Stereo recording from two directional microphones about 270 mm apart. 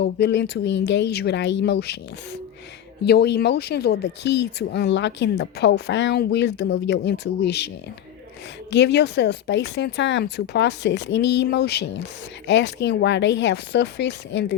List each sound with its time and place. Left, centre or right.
0.0 s speech: left
3.0 s speech: left
8.7 s speech: left